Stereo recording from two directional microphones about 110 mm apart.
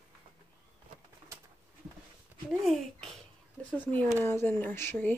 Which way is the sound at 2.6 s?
5° left (ahead or behind).